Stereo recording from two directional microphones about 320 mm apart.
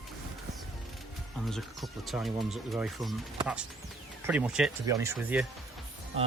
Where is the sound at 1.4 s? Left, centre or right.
Centre.